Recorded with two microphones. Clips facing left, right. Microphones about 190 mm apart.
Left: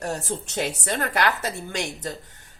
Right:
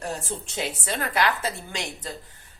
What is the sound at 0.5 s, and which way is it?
Speech, 45° left (ahead or behind).